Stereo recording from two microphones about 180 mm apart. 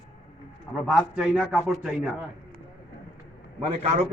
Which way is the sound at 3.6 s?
35° right (ahead or behind).